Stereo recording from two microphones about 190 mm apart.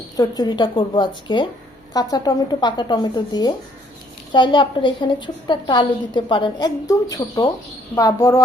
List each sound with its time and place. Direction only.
0.2 s a woman's voice: 20° left (ahead or behind)